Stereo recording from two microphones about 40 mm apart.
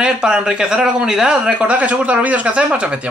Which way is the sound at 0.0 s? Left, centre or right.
Centre.